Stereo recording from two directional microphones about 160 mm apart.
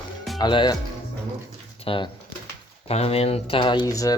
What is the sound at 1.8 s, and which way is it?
Speech, 35° left (ahead or behind).